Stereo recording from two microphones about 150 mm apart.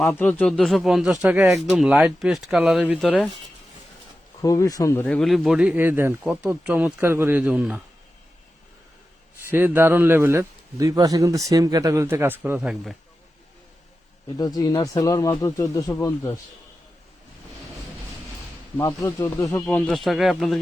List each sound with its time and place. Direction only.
0.1 s speech: 10° left (ahead or behind); by 3.2 s 5° right (ahead or behind)
4.4 s speech: 20° left (ahead or behind)
5.0 s speech: 5° left (ahead or behind)
9.5 s a man's voice: 15° right (ahead or behind)
14.3 s speech: 25° left (ahead or behind)
18.8 s speech: 20° left (ahead or behind)
19.6 s speech: 5° left (ahead or behind)